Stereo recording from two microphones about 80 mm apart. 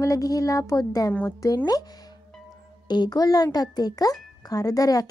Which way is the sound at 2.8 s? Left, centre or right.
Left.